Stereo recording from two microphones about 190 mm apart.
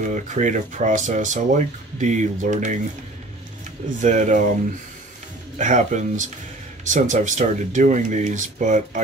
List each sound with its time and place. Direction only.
0.0 s speech: 40° right (ahead or behind)
4.0 s speech: 40° right (ahead or behind)
5.6 s speech: 40° right (ahead or behind)